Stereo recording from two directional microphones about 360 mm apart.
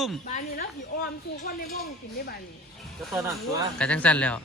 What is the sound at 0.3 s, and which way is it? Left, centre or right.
Speech, left.